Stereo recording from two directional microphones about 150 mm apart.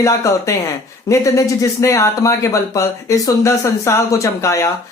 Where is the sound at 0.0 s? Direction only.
20° left (ahead or behind).